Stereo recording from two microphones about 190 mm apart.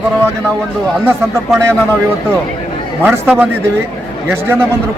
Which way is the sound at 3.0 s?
10° right (ahead or behind).